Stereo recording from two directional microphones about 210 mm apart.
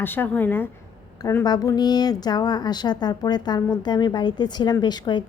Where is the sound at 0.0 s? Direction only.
10° left (ahead or behind).